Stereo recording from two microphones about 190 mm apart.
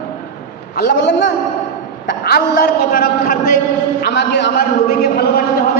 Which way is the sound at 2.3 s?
50° left (ahead or behind).